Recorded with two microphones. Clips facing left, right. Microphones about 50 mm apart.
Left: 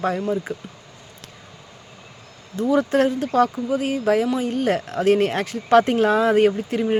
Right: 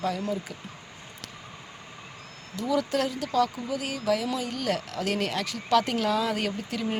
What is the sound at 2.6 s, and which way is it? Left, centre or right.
Speech, left.